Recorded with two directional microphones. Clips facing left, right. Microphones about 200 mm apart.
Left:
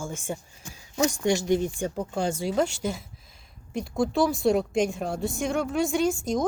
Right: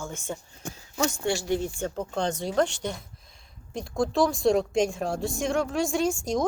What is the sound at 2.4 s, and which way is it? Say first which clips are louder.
A woman's voice: right 1 dB; 5° left (ahead or behind).